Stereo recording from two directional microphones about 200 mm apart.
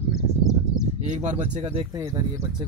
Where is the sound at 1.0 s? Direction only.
35° right (ahead or behind).